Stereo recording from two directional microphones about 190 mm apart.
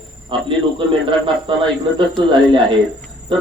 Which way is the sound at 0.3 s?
25° right (ahead or behind).